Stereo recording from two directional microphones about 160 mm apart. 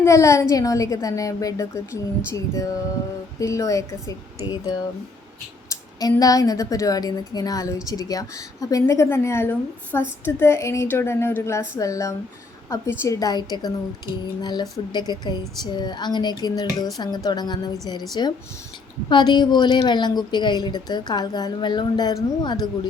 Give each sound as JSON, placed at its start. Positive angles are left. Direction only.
{"t": 0.0, "sound": "a woman's voice", "side_deg": 20}
{"t": 6.0, "sound": "a woman's voice", "side_deg": 25}